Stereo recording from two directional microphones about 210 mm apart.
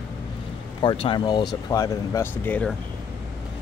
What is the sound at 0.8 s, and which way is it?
Speech, 25° left (ahead or behind).